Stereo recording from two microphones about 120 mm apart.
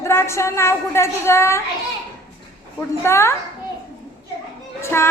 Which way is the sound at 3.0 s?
20° left (ahead or behind).